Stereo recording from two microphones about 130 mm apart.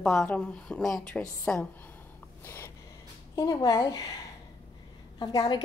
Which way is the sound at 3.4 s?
30° left (ahead or behind).